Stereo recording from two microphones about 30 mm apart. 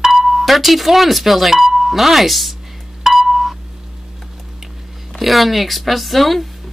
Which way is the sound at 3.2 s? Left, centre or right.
Centre.